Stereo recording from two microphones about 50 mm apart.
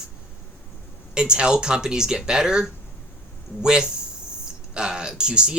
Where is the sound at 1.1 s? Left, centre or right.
Centre.